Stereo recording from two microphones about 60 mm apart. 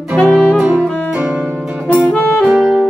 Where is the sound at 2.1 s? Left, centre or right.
Left.